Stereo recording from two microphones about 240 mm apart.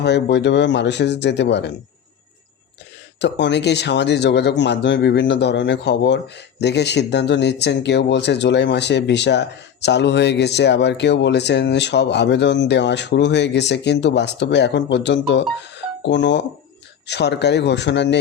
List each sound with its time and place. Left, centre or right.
0.0 s speech: left
3.2 s speech: left